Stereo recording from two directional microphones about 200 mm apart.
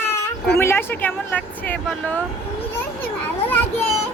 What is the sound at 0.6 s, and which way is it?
Speech, 10° left (ahead or behind).